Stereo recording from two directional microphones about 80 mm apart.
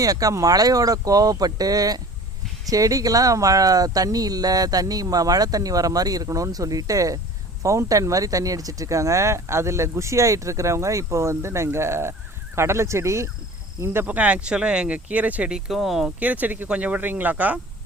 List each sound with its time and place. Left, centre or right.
0.0 s speech: right
13.8 s speech: right
15.5 s speech: centre
16.2 s speech: centre